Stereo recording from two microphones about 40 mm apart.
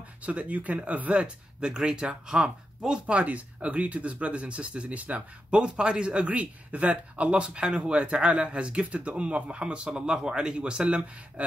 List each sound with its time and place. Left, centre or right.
0.2 s speech: right
1.1 s speech: right